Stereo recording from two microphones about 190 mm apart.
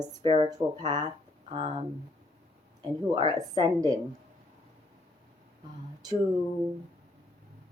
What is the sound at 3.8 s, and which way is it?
Speech, 20° right (ahead or behind).